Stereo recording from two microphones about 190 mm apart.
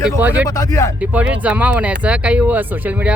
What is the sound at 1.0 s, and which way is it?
Speech, 5° right (ahead or behind).